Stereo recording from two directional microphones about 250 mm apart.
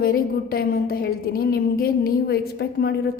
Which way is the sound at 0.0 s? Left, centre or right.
Left.